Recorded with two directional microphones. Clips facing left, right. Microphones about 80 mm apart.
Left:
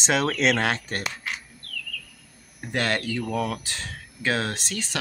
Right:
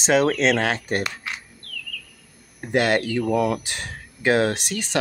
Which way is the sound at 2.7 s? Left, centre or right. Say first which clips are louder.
Right 6 dB; centre.